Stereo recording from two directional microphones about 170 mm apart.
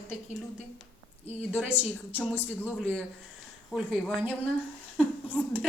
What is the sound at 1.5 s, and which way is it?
Speech, 10° right (ahead or behind).